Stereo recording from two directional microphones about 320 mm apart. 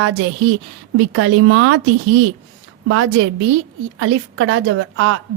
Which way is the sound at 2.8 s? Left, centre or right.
Right.